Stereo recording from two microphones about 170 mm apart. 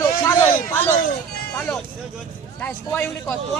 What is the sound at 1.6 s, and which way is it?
Vehicle, 5° left (ahead or behind).